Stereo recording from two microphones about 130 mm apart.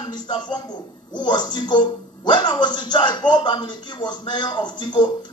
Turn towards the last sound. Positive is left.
turn(degrees=35)  # may be behind; listen again after turning